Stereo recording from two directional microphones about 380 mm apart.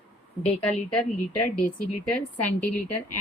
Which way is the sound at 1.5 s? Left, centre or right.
Centre.